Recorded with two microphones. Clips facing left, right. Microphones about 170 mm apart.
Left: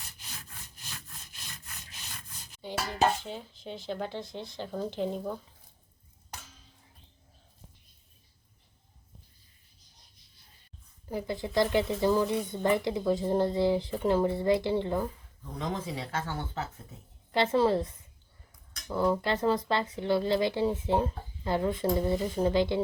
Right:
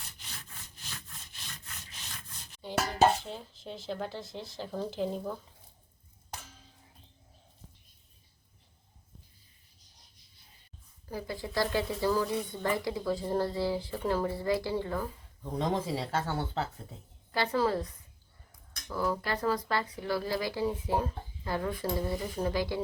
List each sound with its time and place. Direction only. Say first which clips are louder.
2.1 s a sound: even; centre (ahead or behind)
3.0 s speech: right 2 dB; centre (ahead or behind)
11.0 s speech: left 4 dB; 20° left (ahead or behind)
15.5 s speech: right 4 dB; 30° right (ahead or behind)
17.3 s speech: left 4 dB; 25° left (ahead or behind)